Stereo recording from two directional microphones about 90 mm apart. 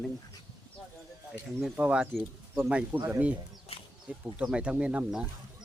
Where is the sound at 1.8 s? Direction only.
15° right (ahead or behind).